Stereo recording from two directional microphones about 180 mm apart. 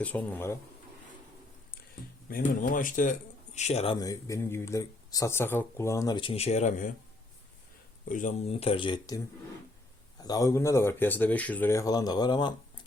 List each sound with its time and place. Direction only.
0.0 s speech: 10° left (ahead or behind)
2.5 s speech: 50° left (ahead or behind)
4.0 s speech: 20° left (ahead or behind); by 6.9 s 45° left (ahead or behind)
8.0 s speech: 45° left (ahead or behind); by 12.8 s 25° left (ahead or behind)